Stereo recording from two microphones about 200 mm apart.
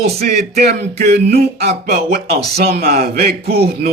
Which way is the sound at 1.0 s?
55° right (ahead or behind).